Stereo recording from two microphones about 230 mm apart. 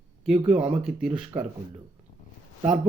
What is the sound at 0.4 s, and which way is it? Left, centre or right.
Speech, centre.